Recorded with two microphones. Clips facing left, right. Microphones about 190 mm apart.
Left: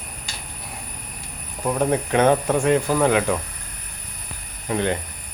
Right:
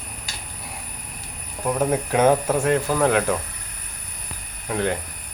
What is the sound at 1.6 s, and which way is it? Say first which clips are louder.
Speech: left 1 dB; 5° right (ahead or behind).